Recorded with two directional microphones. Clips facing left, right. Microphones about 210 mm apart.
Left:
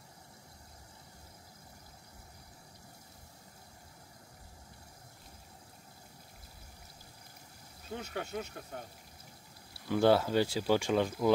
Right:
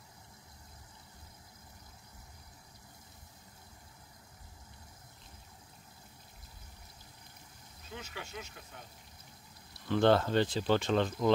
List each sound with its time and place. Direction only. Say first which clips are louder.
7.9 s speech: left 7 dB; 55° left (ahead or behind)
9.8 s speech: even; 10° left (ahead or behind)